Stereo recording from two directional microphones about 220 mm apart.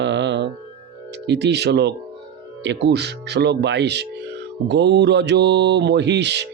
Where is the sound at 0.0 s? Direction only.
50° right (ahead or behind).